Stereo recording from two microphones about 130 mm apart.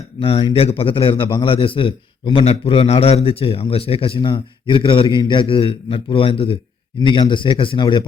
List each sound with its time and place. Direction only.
0.2 s a man's voice: 40° left (ahead or behind)